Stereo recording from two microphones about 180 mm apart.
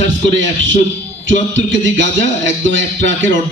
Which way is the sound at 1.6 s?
90° right.